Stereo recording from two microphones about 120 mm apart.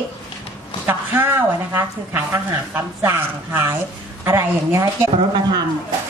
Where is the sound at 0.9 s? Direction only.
15° right (ahead or behind).